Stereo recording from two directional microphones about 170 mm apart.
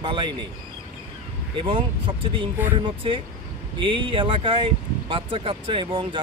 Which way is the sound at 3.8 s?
30° right (ahead or behind).